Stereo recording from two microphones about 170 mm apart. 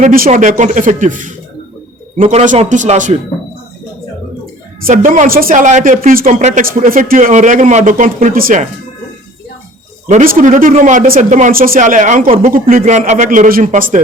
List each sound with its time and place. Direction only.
0.0 s speech: 50° right (ahead or behind)
2.4 s speech: 45° right (ahead or behind)
4.9 s speech: 50° right (ahead or behind)
10.1 s speech: 50° right (ahead or behind)